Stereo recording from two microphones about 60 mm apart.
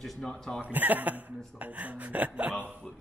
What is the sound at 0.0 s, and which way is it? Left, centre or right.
Speech, centre.